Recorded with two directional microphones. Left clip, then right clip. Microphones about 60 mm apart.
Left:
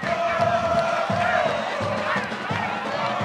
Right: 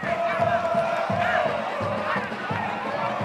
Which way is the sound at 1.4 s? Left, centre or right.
Left.